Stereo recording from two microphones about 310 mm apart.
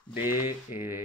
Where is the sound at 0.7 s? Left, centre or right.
Left.